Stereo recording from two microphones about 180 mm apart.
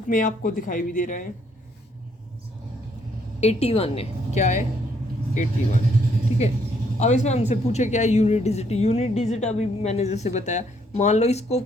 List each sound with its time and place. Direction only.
0.1 s speech: 45° left (ahead or behind)
3.4 s speech: 35° left (ahead or behind)
7.0 s speech: 40° left (ahead or behind)